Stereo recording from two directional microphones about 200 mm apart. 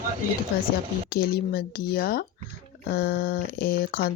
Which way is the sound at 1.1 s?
50° left (ahead or behind).